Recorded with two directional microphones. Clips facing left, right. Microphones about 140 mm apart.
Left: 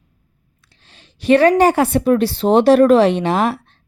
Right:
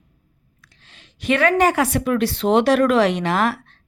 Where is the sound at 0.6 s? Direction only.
30° left (ahead or behind).